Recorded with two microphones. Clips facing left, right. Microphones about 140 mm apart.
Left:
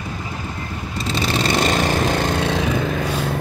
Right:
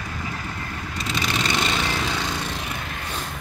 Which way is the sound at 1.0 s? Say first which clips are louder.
Left 5 dB; 30° left (ahead or behind).